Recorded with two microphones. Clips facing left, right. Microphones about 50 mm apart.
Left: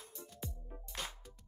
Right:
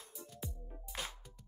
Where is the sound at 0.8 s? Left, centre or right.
Centre.